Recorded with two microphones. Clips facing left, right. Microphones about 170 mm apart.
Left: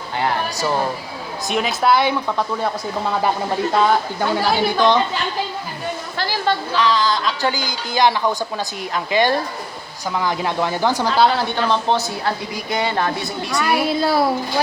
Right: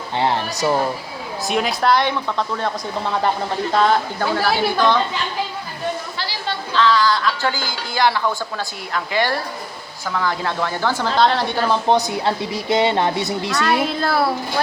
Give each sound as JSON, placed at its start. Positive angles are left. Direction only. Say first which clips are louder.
{"t": 0.2, "sound": "a woman's voice", "louder": "right 1 dB", "side_deg": -25}
{"t": 1.5, "sound": "a woman's voice", "louder": "even", "side_deg": 0}
{"t": 6.1, "sound": "a sound", "louder": "left 6 dB", "side_deg": 50}
{"t": 6.7, "sound": "a woman's voice", "louder": "right 5 dB", "side_deg": 20}
{"t": 11.2, "sound": "speech", "louder": "even", "side_deg": 5}
{"t": 11.5, "sound": "a woman's voice", "louder": "right 2 dB", "side_deg": -10}
{"t": 13.5, "sound": "a woman's voice", "louder": "left 2 dB", "side_deg": 20}